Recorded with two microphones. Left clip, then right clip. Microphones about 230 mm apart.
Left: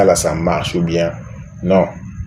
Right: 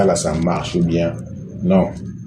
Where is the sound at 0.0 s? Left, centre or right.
Left.